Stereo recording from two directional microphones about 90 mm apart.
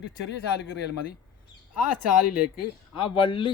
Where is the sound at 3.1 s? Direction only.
70° left (ahead or behind).